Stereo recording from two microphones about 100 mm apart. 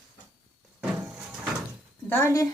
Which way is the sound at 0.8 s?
10° right (ahead or behind).